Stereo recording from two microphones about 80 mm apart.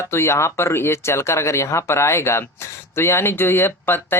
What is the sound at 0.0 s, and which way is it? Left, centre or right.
Speech, left.